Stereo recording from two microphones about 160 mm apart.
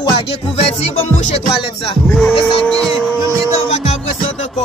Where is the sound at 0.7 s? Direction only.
40° left (ahead or behind).